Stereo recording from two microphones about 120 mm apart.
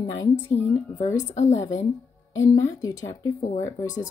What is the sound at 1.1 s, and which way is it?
Speech, 80° left.